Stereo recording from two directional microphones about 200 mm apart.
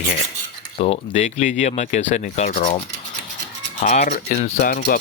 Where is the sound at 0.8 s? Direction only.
35° left (ahead or behind).